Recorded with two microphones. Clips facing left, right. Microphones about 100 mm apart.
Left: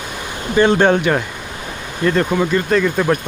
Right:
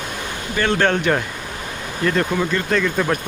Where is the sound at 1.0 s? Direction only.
5° left (ahead or behind).